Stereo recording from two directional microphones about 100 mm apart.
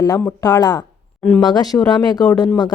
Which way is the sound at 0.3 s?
35° left (ahead or behind).